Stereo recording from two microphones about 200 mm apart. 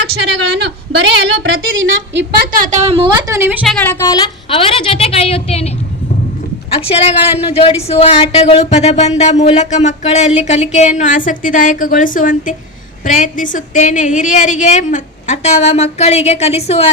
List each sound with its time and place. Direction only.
0.1 s a woman's voice: 55° right (ahead or behind); by 3.6 s 15° right (ahead or behind)
4.0 s a woman's voice: 20° left (ahead or behind)
6.7 s speech: 30° left (ahead or behind)